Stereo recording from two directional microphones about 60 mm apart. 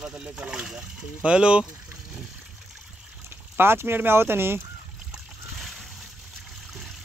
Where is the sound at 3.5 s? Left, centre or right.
Right.